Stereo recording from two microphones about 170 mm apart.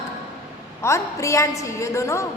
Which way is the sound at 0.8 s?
15° left (ahead or behind).